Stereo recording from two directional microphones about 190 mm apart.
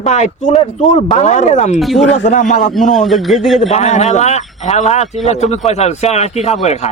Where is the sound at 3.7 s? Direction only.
35° left (ahead or behind).